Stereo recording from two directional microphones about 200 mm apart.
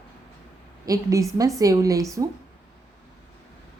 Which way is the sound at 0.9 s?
15° right (ahead or behind).